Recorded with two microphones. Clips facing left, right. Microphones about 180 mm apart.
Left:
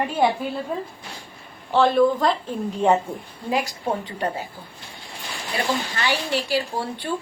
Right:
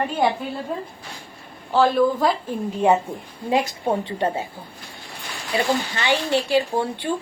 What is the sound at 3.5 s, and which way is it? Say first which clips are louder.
Speech: right 3 dB; 25° right (ahead or behind).